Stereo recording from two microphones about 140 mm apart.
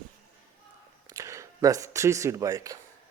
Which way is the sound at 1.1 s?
20° right (ahead or behind).